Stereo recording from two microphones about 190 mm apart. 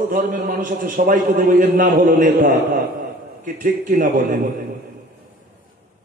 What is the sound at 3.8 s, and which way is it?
Speech, 45° right (ahead or behind).